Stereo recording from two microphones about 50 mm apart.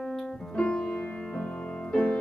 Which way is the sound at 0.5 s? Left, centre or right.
Left.